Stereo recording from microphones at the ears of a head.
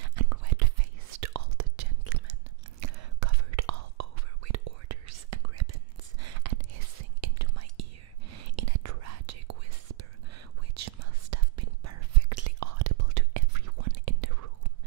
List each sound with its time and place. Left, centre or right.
0.0 s whispering: right